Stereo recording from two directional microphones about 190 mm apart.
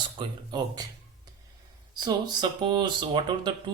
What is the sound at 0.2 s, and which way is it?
Speech, 20° right (ahead or behind).